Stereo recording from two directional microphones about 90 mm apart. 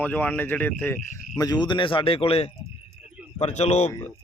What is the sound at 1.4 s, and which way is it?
Speech, 50° left (ahead or behind).